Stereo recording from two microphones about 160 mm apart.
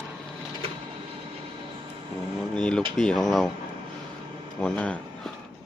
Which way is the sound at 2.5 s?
5° left (ahead or behind).